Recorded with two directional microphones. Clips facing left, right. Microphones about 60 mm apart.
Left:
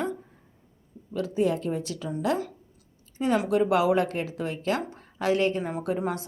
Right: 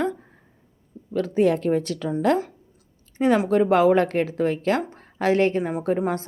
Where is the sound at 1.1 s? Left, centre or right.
Right.